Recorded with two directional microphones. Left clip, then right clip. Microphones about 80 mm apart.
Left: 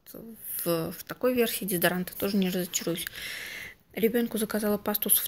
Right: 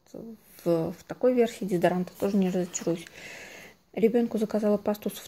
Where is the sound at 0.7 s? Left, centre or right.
Right.